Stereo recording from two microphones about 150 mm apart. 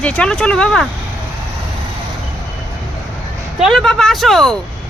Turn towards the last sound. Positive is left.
turn(degrees=0)  # may be behind; listen again after turning